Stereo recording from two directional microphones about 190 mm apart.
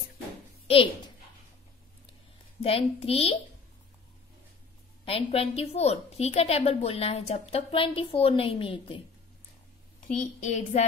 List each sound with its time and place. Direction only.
0.7 s a woman's voice: 30° left (ahead or behind)
2.6 s a woman's voice: 30° left (ahead or behind)
5.0 s a woman's voice: 30° left (ahead or behind)
10.4 s a woman's voice: 40° left (ahead or behind)